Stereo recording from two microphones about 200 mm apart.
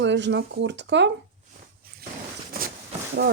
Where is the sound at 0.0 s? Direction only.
60° right (ahead or behind).